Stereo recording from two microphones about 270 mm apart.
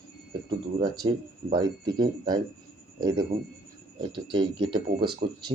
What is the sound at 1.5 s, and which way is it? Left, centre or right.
Speech, centre.